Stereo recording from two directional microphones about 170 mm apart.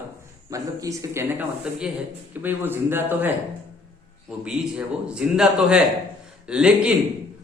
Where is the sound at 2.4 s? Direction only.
10° right (ahead or behind).